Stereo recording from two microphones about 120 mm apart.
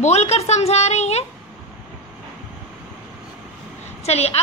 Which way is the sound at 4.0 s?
60° left (ahead or behind).